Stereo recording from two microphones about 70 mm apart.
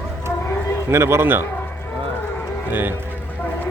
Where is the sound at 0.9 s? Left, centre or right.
Right.